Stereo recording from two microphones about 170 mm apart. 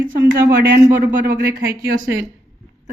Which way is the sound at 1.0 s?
55° right (ahead or behind).